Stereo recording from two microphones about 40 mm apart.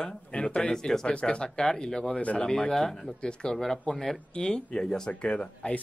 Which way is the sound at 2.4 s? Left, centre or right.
Centre.